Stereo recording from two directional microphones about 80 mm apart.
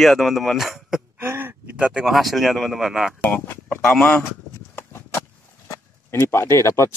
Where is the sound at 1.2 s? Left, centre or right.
Right.